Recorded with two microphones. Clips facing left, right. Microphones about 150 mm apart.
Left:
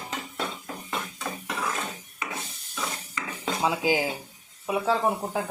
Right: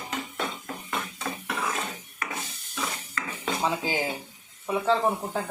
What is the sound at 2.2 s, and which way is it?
Wood, 20° left (ahead or behind).